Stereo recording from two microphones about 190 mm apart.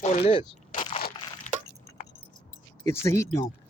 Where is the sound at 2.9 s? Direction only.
15° left (ahead or behind).